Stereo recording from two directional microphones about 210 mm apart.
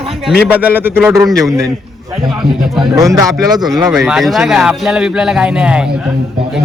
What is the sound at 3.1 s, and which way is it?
Speech, 15° right (ahead or behind).